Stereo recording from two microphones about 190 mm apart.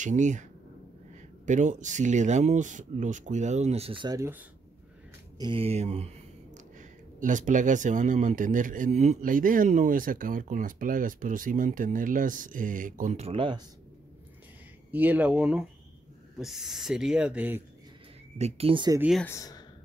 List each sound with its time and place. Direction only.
0.0 s speech: 40° right (ahead or behind); by 4.5 s 15° right (ahead or behind)
5.4 s speech: 30° right (ahead or behind)
14.9 s speech: 10° right (ahead or behind)
18.4 s speech: 30° right (ahead or behind)
18.9 s speech: 5° right (ahead or behind)
19.2 s speech: 15° left (ahead or behind)